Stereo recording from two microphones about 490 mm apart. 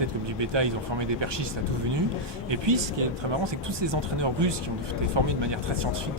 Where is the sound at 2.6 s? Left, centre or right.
Right.